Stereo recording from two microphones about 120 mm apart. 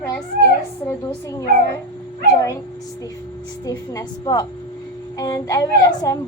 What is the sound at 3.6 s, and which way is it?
A child's voice, 35° left (ahead or behind).